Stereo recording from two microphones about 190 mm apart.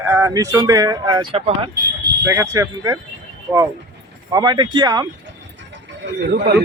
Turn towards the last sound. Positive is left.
turn(degrees=-60)  # may be behind; listen again after turning